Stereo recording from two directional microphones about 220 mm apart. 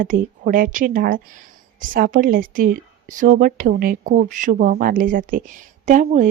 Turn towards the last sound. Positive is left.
turn(degrees=-35)  # may be behind; listen again after turning